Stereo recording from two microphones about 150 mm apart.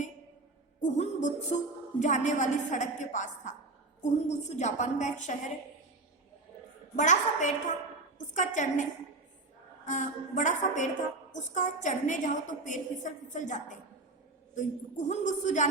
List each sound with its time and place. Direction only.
0.8 s a woman's voice: 55° left (ahead or behind)
6.9 s a woman's voice: 55° left (ahead or behind)